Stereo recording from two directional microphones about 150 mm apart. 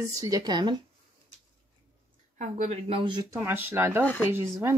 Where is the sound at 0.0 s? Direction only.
25° right (ahead or behind).